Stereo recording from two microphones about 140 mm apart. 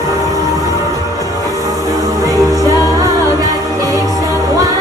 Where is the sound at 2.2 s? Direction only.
25° right (ahead or behind).